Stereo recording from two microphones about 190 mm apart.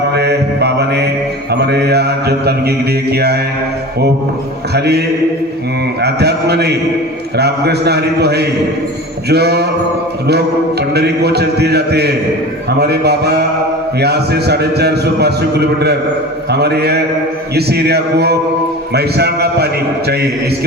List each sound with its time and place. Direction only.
0.1 s mantra: 60° right (ahead or behind)
1.6 s a man's voice: 60° right (ahead or behind)
4.7 s a man's voice: 60° right (ahead or behind)